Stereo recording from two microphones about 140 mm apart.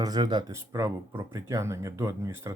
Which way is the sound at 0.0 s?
30° right (ahead or behind).